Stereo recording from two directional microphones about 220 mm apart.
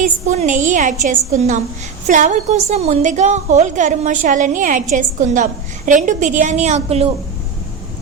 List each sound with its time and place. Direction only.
0.3 s a woman's voice: 35° right (ahead or behind)